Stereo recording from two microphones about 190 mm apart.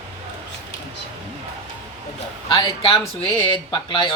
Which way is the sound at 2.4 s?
25° left (ahead or behind).